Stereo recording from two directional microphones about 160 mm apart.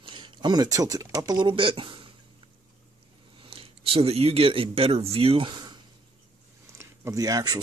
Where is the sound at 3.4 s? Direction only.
35° right (ahead or behind).